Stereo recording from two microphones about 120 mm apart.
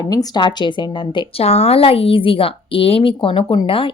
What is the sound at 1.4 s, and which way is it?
Speech, 60° left (ahead or behind).